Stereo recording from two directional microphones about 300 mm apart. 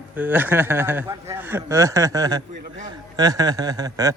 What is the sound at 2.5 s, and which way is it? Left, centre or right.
Speech, right.